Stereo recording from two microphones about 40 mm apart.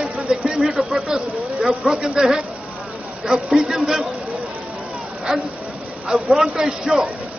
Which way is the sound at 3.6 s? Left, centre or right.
Centre.